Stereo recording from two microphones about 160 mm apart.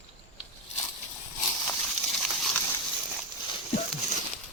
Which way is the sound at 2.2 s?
Centre (ahead or behind).